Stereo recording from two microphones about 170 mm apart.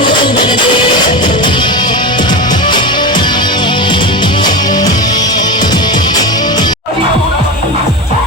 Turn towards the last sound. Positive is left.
turn(degrees=25)  # may be behind; listen again after turning